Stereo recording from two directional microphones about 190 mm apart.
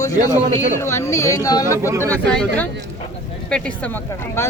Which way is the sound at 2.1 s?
5° left (ahead or behind).